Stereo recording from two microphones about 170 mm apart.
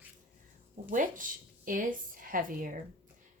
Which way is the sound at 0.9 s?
50° right (ahead or behind).